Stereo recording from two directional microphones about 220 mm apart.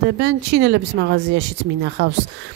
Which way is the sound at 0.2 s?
55° right (ahead or behind).